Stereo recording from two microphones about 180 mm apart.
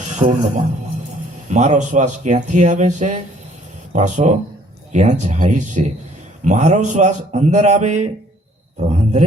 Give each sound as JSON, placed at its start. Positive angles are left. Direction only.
{"t": 0.0, "sound": "a man's voice", "side_deg": -40}